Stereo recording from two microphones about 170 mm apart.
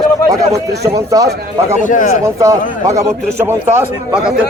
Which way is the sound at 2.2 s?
20° right (ahead or behind).